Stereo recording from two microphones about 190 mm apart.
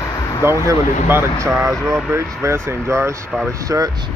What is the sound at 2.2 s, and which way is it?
Speech, 15° right (ahead or behind).